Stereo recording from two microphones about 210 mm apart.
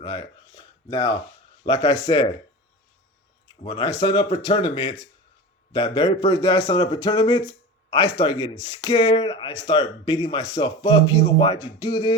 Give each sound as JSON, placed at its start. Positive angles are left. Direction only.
{"t": 0.0, "sound": "speech", "side_deg": 20}
{"t": 3.6, "sound": "speech", "side_deg": 25}